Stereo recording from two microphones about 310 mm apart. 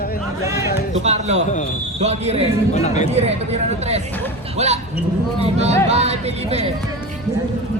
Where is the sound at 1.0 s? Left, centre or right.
Right.